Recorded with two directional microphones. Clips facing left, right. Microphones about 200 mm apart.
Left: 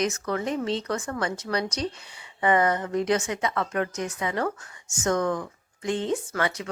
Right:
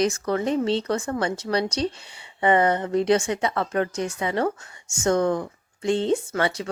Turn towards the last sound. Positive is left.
turn(degrees=-30)  # may be behind; listen again after turning